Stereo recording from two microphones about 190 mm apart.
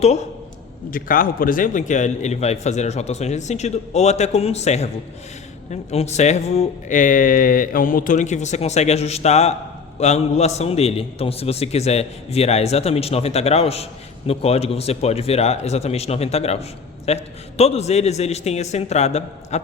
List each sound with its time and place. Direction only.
0.0 s a man's voice: 35° left (ahead or behind)
0.9 s a man's voice: 45° left (ahead or behind)
5.9 s a man's voice: 35° left (ahead or behind)